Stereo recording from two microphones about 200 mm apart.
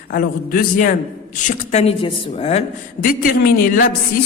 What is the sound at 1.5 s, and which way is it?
A woman's voice, 30° left (ahead or behind).